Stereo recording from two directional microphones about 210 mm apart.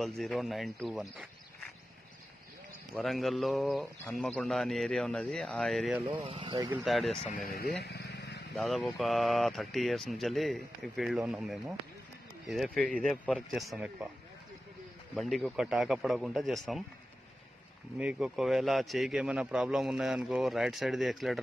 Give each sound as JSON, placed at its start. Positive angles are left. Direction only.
{"t": 0.0, "sound": "a man's voice", "side_deg": 0}
{"t": 2.9, "sound": "a man's voice", "side_deg": 0}
{"t": 6.0, "sound": "speech", "side_deg": -25}
{"t": 6.7, "sound": "a man's voice", "side_deg": 0}
{"t": 7.4, "sound": "speech", "side_deg": 45}
{"t": 7.8, "sound": "vehicle", "side_deg": 50}
{"t": 8.5, "sound": "a man's voice", "side_deg": 0}
{"t": 15.1, "sound": "a man's voice", "side_deg": 0}
{"t": 17.9, "sound": "a man's voice", "side_deg": -5}